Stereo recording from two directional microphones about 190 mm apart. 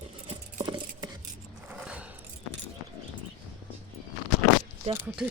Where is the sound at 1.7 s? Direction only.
5° right (ahead or behind).